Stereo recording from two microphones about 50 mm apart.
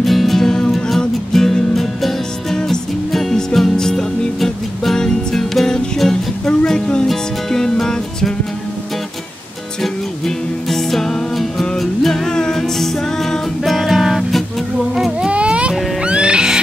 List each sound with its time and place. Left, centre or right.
0.0 s music: centre
9.8 s music: centre
15.1 s baby cry: centre
16.0 s music: centre